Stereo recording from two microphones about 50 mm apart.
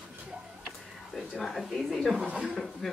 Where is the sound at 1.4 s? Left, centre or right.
Centre.